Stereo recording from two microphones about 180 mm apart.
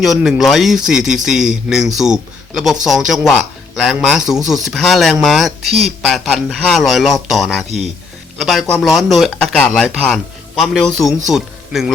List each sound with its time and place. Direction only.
0.0 s a man's voice: centre (ahead or behind)